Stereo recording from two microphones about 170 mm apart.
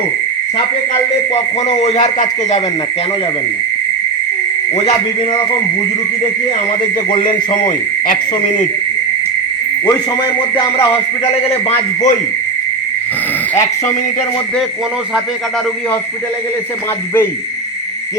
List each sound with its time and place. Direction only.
1.8 s speech: 40° left (ahead or behind)
7.1 s speech: 30° left (ahead or behind)
8.0 s speech: 55° left (ahead or behind)
11.4 s speech: 35° left (ahead or behind)